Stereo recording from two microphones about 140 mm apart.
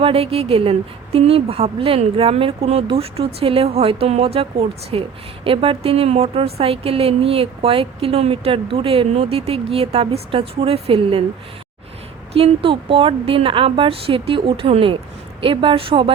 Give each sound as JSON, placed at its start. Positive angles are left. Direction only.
{"t": 0.0, "sound": "a woman's voice", "side_deg": -45}
{"t": 12.3, "sound": "a woman's voice", "side_deg": -40}